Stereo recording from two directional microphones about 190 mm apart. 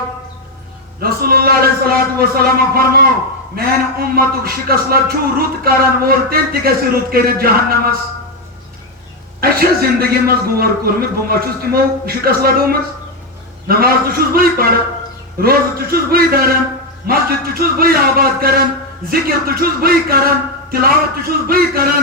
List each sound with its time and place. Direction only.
1.0 s a man's voice: 55° right (ahead or behind)
9.4 s a man's voice: 50° right (ahead or behind)